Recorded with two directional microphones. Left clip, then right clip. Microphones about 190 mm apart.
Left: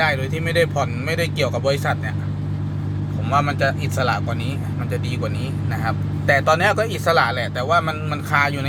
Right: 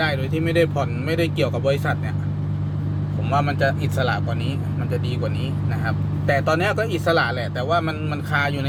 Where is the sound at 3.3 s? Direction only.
5° right (ahead or behind).